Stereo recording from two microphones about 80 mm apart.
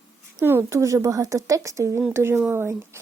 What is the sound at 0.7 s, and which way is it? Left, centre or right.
Speech, right.